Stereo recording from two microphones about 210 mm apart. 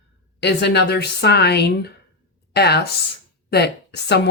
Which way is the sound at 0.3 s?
55° left (ahead or behind).